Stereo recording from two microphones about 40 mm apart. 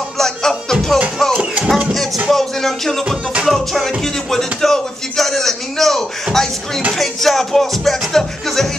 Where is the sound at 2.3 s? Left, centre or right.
Centre.